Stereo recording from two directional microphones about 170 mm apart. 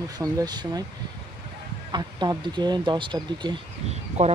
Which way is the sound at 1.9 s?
25° right (ahead or behind).